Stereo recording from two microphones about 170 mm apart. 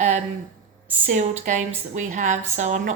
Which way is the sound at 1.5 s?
45° right (ahead or behind).